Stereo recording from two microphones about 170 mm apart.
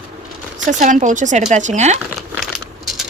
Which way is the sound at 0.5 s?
45° right (ahead or behind).